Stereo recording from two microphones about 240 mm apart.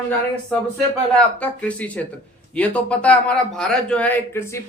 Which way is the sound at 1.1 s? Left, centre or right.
Centre.